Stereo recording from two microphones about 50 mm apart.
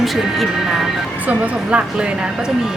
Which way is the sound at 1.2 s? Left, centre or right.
Right.